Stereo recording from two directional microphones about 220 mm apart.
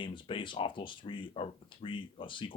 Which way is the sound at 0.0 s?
25° left (ahead or behind).